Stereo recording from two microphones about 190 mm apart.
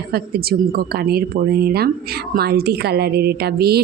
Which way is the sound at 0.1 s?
55° right (ahead or behind).